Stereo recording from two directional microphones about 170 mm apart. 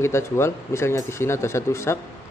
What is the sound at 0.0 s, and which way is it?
Speech, 15° left (ahead or behind).